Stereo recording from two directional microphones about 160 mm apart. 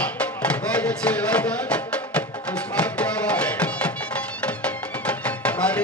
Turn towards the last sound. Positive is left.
turn(degrees=10)  # may be behind; listen again after turning